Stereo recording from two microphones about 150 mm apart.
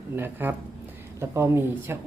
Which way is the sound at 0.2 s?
15° right (ahead or behind).